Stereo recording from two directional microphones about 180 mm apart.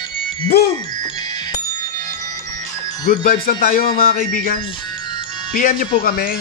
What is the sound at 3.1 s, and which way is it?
Speech, 55° left (ahead or behind).